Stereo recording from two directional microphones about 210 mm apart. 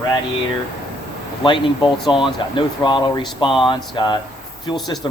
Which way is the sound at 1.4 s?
20° left (ahead or behind).